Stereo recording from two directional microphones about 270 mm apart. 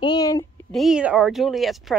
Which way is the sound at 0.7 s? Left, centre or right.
Centre.